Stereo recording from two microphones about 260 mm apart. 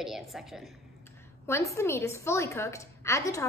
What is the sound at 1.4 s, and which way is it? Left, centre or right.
A woman's voice, centre.